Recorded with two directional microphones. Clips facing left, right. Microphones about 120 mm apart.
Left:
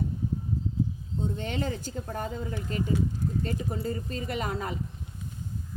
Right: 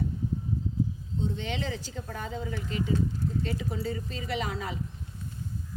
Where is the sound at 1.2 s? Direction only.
45° left (ahead or behind).